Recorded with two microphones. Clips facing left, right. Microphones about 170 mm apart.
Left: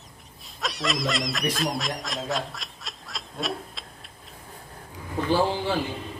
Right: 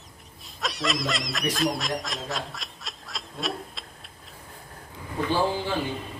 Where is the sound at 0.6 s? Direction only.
Centre (ahead or behind).